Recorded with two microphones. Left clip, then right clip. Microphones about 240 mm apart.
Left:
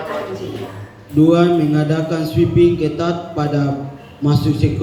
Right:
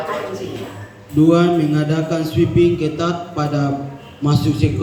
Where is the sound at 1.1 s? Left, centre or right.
Centre.